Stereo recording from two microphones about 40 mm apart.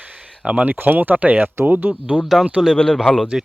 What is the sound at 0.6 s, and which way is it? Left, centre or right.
Speech, right.